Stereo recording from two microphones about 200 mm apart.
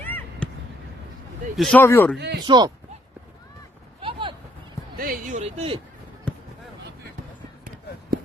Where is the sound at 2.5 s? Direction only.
20° right (ahead or behind).